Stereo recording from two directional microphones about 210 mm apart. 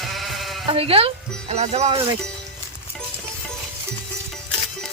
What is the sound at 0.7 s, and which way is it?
Speech, 25° right (ahead or behind).